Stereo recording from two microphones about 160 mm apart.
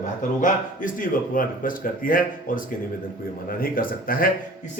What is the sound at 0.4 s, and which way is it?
Speech, 55° left (ahead or behind).